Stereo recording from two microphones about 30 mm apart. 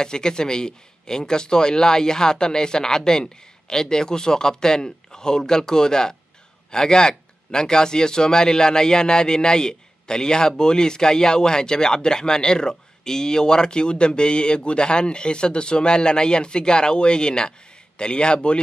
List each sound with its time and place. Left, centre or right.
0.0 s speech: left